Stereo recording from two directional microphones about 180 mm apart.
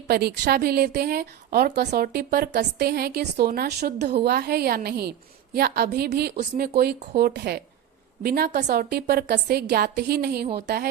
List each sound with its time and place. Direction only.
0.1 s a woman's voice: 60° right (ahead or behind)